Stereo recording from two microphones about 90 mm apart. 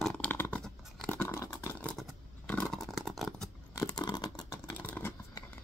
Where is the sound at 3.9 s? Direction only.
55° left (ahead or behind).